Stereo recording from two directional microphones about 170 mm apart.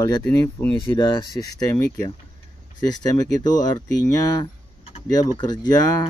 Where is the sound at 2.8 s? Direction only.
25° left (ahead or behind).